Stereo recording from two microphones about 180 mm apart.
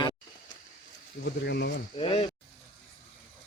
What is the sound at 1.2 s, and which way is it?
Speech, 65° left (ahead or behind).